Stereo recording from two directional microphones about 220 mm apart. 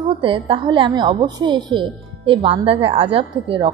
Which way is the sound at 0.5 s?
20° right (ahead or behind).